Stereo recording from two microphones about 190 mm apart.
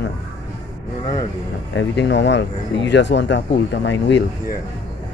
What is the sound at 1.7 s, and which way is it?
Speech, 65° left (ahead or behind).